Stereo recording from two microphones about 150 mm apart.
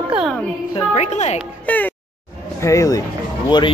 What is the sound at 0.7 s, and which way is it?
Speech, 50° left (ahead or behind).